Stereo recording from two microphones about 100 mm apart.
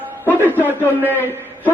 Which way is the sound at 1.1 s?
20° left (ahead or behind).